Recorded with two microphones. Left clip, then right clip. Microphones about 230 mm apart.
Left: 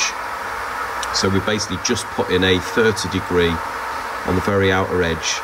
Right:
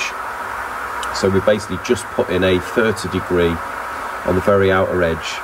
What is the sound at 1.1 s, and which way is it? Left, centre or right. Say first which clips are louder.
Speech: right 5 dB; centre.